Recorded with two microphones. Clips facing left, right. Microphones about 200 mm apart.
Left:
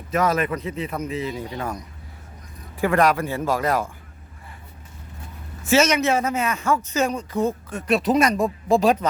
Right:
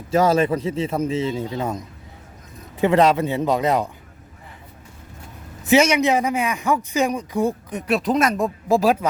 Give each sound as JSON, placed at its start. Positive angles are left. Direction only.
{"t": 0.1, "sound": "a man's voice", "side_deg": -30}
{"t": 5.6, "sound": "a man's voice", "side_deg": -15}
{"t": 7.9, "sound": "speech", "side_deg": 0}